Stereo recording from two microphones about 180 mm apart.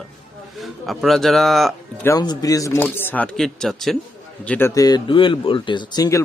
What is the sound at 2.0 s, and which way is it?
A man's voice, 20° left (ahead or behind).